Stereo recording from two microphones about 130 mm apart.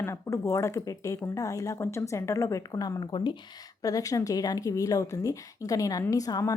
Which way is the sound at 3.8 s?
25° left (ahead or behind).